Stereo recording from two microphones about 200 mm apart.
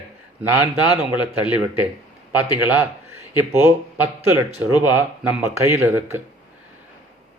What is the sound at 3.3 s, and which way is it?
A man's voice, 10° right (ahead or behind).